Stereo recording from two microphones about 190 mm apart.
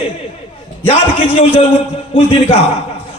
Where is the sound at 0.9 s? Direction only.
30° left (ahead or behind).